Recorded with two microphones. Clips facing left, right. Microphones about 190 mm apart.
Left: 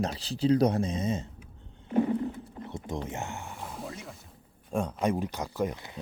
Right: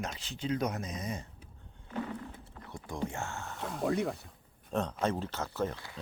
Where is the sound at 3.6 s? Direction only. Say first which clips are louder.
Right 8 dB; 70° right (ahead or behind).